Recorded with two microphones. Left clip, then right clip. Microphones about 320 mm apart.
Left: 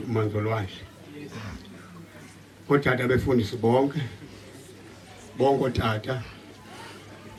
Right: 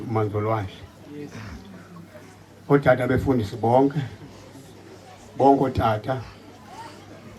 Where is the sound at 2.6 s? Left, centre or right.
Right.